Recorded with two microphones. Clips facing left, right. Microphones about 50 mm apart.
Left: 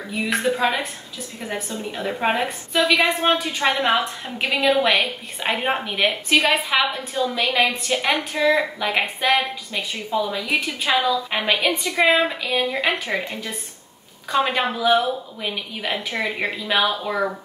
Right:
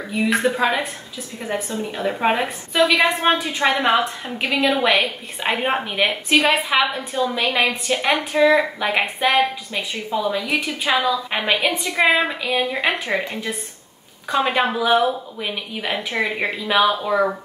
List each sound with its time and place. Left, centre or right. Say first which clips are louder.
0.1 s a woman's voice: right 3 dB; centre
1.9 s a woman's voice: right 2 dB; centre
14.3 s a woman's voice: right 2 dB; centre